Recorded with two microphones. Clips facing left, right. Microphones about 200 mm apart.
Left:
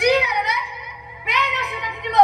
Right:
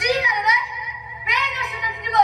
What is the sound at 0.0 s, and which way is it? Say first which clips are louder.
Music: left 4 dB; 60° left (ahead or behind).